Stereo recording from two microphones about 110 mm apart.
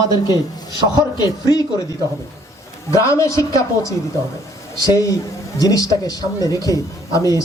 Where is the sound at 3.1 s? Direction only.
25° left (ahead or behind).